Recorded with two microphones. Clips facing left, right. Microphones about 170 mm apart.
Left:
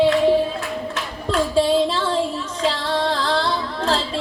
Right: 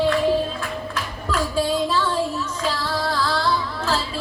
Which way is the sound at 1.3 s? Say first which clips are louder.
Left 5 dB; 30° left (ahead or behind).